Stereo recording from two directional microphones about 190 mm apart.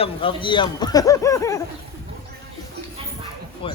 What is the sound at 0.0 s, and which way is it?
Speech, 25° left (ahead or behind).